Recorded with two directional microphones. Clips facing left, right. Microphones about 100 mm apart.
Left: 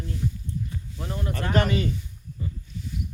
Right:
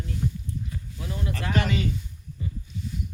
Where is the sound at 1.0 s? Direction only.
40° left (ahead or behind).